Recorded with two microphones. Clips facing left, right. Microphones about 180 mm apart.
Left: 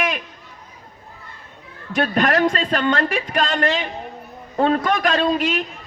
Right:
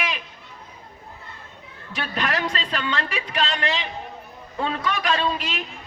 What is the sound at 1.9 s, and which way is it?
A man's voice, 50° left (ahead or behind).